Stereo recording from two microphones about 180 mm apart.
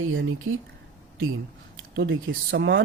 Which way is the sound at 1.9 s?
80° right.